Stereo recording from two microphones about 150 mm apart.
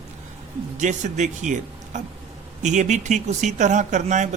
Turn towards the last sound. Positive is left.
turn(degrees=-55)  # may be behind; listen again after turning